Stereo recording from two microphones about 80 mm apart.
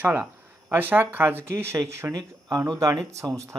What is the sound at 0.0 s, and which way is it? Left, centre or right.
Speech, right.